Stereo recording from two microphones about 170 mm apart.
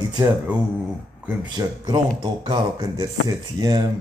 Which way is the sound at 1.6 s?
25° right (ahead or behind).